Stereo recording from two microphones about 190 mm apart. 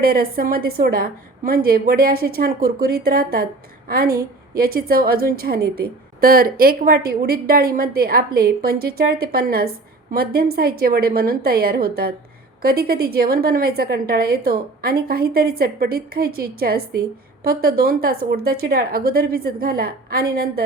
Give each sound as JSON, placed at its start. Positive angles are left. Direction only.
{"t": 0.0, "sound": "a woman's voice", "side_deg": -50}